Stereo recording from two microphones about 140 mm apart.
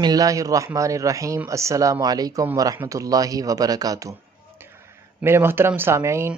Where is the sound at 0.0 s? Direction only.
25° right (ahead or behind).